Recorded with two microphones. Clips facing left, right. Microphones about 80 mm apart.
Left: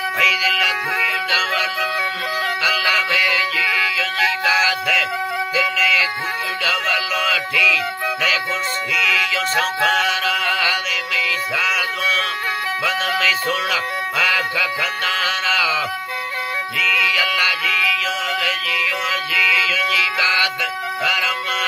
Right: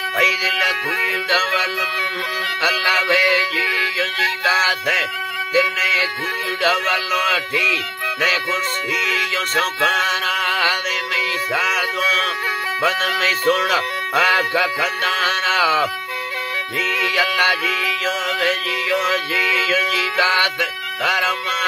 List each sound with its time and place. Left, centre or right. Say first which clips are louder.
0.2 s music: even; right
17.0 s music: right 2 dB; right
21.0 s speech: right 3 dB; right